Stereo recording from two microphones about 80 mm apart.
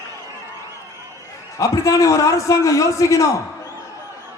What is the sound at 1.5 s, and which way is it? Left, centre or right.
Speech, left.